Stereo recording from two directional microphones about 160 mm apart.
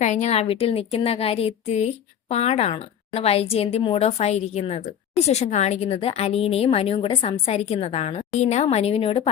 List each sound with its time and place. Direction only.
0.0 s a woman's voice: 45° left (ahead or behind)